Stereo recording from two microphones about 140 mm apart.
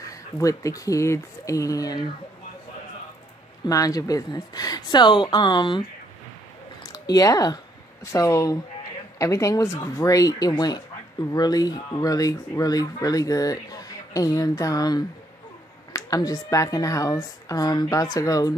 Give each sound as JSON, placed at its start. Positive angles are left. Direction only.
{"t": 0.1, "sound": "speech", "side_deg": 25}
{"t": 3.6, "sound": "speech", "side_deg": 25}
{"t": 6.8, "sound": "a sound", "side_deg": 25}
{"t": 8.0, "sound": "speech", "side_deg": 20}